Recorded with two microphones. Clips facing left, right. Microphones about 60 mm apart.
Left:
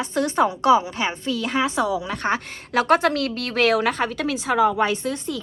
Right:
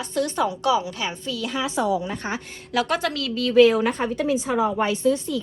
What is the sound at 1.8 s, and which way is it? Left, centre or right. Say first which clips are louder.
Speech: even; left.